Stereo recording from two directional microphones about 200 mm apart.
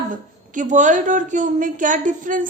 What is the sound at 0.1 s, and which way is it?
A woman's voice, 40° right (ahead or behind).